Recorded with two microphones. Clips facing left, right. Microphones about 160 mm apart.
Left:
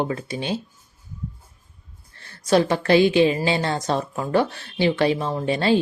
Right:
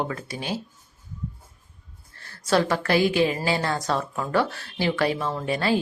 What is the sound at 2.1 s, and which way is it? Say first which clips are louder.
A woman's voice: left 3 dB; 20° left (ahead or behind).